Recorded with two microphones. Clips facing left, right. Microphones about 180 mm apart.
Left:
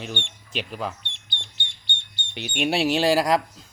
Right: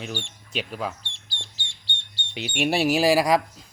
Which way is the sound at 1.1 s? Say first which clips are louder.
Left 1 dB; 30° right (ahead or behind).